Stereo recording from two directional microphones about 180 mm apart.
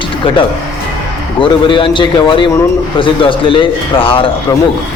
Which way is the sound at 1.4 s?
30° left (ahead or behind).